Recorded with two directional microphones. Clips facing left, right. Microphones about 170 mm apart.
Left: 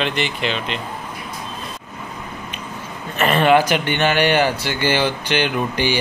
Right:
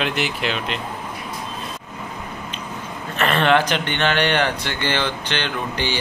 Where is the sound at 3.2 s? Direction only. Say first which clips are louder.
Left 3 dB; 5° left (ahead or behind).